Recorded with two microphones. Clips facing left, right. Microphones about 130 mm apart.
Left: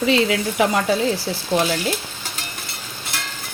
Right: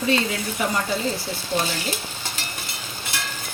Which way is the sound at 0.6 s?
90° left.